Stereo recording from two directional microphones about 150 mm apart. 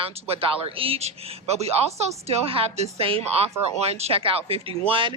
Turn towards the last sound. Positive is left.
turn(degrees=-35)  # may be behind; listen again after turning